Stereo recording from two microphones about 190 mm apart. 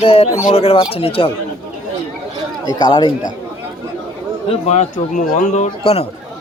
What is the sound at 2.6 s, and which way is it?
Speech, 25° left (ahead or behind).